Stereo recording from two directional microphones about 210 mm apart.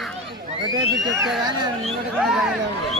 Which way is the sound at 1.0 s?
Centre (ahead or behind).